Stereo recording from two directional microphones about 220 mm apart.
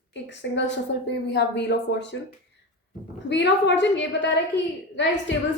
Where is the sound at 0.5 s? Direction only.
50° left (ahead or behind).